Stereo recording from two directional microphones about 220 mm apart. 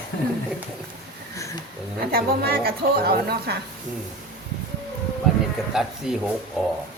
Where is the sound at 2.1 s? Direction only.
45° right (ahead or behind).